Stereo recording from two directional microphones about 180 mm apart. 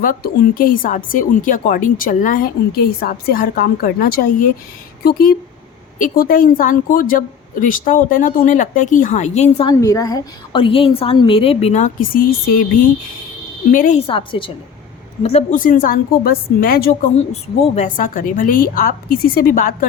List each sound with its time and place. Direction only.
0.0 s a woman's voice: 50° left (ahead or behind)
9.6 s a woman's voice: 20° left (ahead or behind); by 12.2 s 45° left (ahead or behind)
13.7 s a woman's voice: 45° left (ahead or behind)
14.1 s a woman's voice: 30° left (ahead or behind); by 16.9 s 55° left (ahead or behind)
17.2 s a woman's voice: 40° left (ahead or behind)